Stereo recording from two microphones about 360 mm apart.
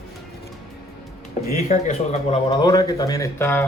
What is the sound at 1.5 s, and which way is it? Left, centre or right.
Speech, left.